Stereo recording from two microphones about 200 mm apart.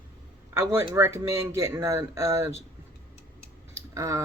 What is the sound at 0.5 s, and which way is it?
Speech, 15° right (ahead or behind).